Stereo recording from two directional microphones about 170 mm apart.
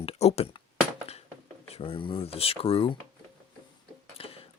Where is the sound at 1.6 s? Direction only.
35° left (ahead or behind).